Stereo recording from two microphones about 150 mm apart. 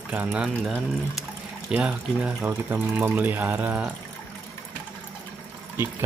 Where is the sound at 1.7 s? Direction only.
10° right (ahead or behind).